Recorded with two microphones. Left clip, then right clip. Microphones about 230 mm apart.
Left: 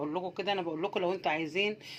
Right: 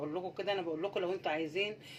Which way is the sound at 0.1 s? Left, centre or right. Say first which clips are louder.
Left 3 dB; left.